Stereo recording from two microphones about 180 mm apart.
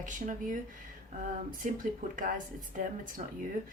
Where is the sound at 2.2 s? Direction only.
50° right (ahead or behind).